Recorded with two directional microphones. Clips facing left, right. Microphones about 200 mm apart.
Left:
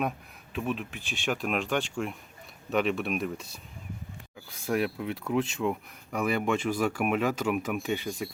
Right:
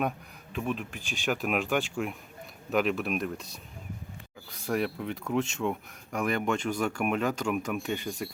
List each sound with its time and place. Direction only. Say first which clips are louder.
0.5 s speech: even; centre (ahead or behind)
4.6 s speech: left 1 dB; centre (ahead or behind)